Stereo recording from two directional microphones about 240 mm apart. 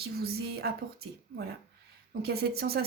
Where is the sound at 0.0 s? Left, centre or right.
Right.